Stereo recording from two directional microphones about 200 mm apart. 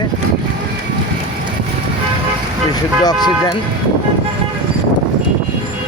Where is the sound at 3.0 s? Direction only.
20° left (ahead or behind).